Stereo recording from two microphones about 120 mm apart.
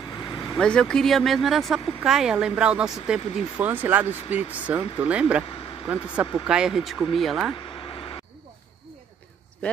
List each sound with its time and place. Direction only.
0.1 s vehicle: 35° left (ahead or behind)
0.6 s a woman's voice: 5° left (ahead or behind); by 5.2 s 10° right (ahead or behind)
6.4 s a woman's voice: 5° right (ahead or behind)
7.8 s vehicle: 45° left (ahead or behind)